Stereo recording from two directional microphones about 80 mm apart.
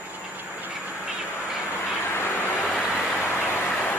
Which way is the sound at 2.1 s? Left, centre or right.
Left.